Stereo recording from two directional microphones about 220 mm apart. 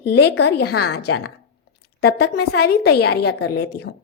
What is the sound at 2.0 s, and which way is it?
Speech, 45° left (ahead or behind).